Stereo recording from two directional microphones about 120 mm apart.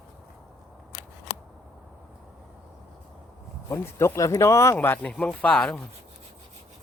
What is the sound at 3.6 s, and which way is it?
Speech, 20° left (ahead or behind).